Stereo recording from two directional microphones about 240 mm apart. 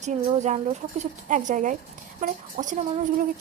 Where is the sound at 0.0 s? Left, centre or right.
Right.